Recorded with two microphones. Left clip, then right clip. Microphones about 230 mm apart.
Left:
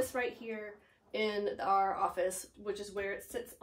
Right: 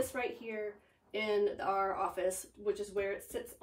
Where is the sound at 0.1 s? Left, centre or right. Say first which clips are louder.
Left 1 dB; centre.